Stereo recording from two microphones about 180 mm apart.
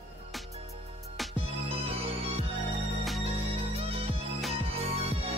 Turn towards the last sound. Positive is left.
turn(degrees=-35)  # may be behind; listen again after turning